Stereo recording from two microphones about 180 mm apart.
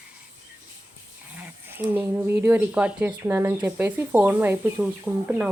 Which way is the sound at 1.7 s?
10° right (ahead or behind).